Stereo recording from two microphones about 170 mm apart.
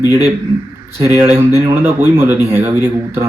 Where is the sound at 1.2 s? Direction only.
15° right (ahead or behind).